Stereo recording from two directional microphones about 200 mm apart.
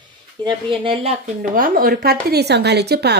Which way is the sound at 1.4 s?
45° right (ahead or behind).